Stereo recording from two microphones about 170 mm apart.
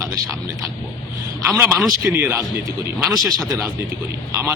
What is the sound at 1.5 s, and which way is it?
Speech, 15° right (ahead or behind).